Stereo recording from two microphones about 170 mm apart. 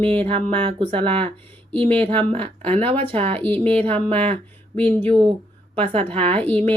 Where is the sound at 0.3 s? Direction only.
35° right (ahead or behind).